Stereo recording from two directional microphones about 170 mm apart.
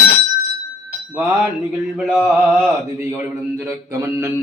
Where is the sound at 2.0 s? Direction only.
5° right (ahead or behind).